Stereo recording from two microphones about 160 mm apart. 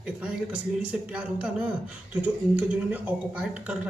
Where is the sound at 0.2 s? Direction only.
5° right (ahead or behind).